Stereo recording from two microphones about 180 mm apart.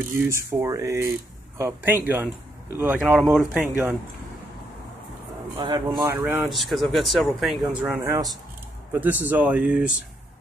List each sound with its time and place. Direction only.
0.1 s speech: 15° right (ahead or behind)
5.6 s speech: 20° right (ahead or behind)
6.1 s speech: 10° right (ahead or behind)
6.5 s speech: centre (ahead or behind)
8.0 s speech: 20° right (ahead or behind)